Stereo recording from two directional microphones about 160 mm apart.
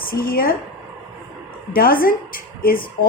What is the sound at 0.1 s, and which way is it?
Speech, 65° left (ahead or behind).